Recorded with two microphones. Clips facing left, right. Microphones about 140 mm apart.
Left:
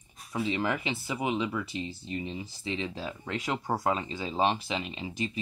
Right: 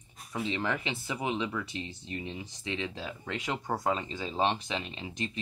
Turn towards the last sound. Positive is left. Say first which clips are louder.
# left 3 dB
turn(degrees=5)  # may be behind; listen again after turning